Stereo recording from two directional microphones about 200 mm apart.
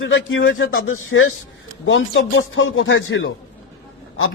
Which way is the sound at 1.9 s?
70° left (ahead or behind).